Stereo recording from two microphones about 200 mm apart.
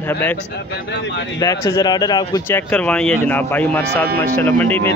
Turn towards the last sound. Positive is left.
turn(degrees=10)  # may be behind; listen again after turning